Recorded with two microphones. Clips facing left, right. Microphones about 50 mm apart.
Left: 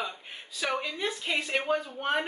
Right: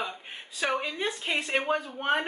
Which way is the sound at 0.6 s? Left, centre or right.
Right.